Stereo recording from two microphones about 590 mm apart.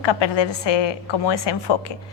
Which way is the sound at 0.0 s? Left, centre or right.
Left.